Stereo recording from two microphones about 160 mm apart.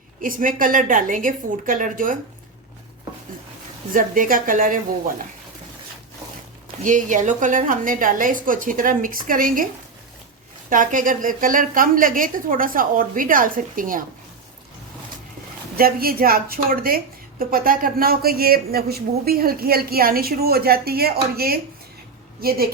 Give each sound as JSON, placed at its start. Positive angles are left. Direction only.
{"t": 0.2, "sound": "a woman's voice", "side_deg": -60}
{"t": 3.9, "sound": "a woman's voice", "side_deg": -60}
{"t": 6.8, "sound": "a woman's voice", "side_deg": -55}
{"t": 10.7, "sound": "a woman's voice", "side_deg": -55}
{"t": 15.7, "sound": "speech", "side_deg": -70}